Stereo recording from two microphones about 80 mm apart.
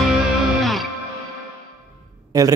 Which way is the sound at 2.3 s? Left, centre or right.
Right.